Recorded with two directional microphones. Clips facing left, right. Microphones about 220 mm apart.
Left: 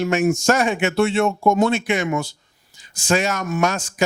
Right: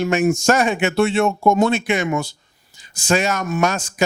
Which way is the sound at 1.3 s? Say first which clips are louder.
Right 1 dB; 30° right (ahead or behind).